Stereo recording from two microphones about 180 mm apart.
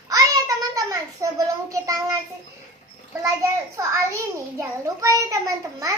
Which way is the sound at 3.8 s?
15° right (ahead or behind).